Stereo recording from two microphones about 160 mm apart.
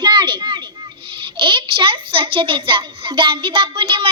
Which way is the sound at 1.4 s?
35° right (ahead or behind).